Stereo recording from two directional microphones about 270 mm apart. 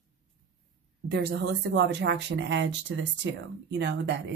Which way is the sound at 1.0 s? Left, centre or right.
Right.